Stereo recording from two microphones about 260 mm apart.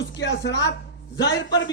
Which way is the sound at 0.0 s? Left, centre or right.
Left.